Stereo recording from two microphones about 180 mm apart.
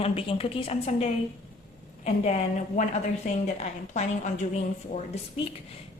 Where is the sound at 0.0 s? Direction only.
30° left (ahead or behind).